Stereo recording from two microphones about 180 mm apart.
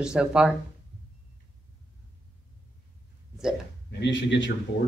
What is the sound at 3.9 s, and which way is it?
Speech, 75° left (ahead or behind).